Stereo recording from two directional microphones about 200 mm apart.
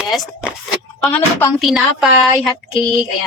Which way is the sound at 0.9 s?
10° left (ahead or behind).